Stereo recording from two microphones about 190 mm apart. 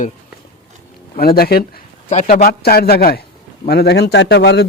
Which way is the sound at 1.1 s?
55° left (ahead or behind).